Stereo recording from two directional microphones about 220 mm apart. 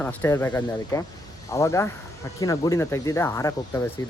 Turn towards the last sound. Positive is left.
turn(degrees=15)  # may be behind; listen again after turning